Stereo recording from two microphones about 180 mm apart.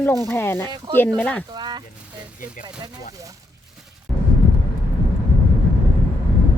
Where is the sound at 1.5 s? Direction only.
25° right (ahead or behind).